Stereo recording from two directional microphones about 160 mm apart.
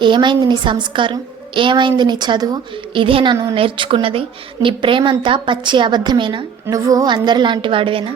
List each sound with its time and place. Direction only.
0.0 s a woman's voice: 30° right (ahead or behind)